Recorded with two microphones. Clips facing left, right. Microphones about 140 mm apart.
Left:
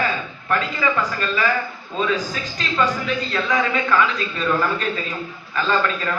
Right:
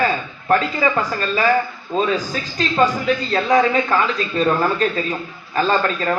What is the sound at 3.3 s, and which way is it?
A man's voice, 40° right (ahead or behind).